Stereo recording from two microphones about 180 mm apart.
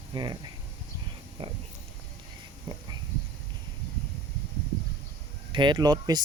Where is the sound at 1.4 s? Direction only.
30° right (ahead or behind).